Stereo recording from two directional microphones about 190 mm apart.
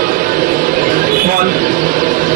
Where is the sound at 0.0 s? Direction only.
45° right (ahead or behind).